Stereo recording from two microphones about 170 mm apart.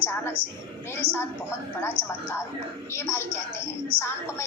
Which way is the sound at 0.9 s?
15° left (ahead or behind).